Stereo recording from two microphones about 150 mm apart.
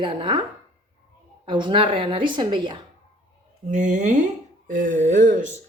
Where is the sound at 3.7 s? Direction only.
55° right (ahead or behind).